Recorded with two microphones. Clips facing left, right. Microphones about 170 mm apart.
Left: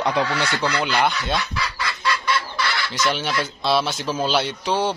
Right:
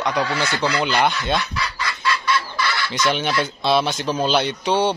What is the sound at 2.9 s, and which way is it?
Speech, centre (ahead or behind).